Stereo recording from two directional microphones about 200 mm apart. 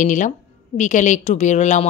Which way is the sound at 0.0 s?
40° left (ahead or behind).